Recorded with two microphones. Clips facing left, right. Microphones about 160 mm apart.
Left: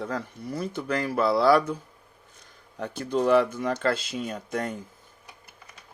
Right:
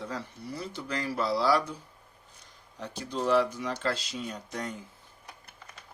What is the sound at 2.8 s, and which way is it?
Speech, 55° left (ahead or behind).